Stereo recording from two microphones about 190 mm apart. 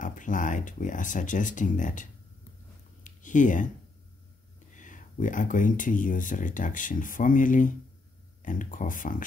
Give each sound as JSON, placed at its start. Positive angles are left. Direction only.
{"t": 0.0, "sound": "speech", "side_deg": 45}
{"t": 3.0, "sound": "a sound", "side_deg": 40}
{"t": 4.7, "sound": "speech", "side_deg": 40}